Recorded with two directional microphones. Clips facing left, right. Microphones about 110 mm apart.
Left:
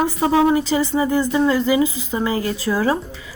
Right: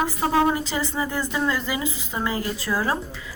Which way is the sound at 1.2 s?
30° left (ahead or behind).